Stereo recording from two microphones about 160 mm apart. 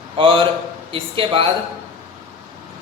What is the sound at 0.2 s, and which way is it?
A man's voice, 35° right (ahead or behind).